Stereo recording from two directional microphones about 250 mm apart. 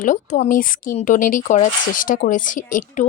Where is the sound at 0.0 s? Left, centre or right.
Left.